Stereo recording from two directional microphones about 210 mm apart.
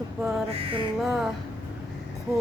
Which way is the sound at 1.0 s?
Centre (ahead or behind).